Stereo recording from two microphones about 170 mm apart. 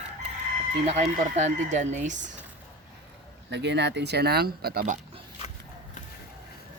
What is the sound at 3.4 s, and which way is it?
Speech, 90° right.